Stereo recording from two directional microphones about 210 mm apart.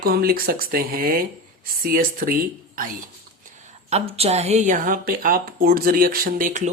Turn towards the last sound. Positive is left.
turn(degrees=-35)  # may be behind; listen again after turning